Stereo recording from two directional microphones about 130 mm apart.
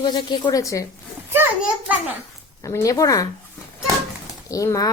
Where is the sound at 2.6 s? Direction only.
25° left (ahead or behind).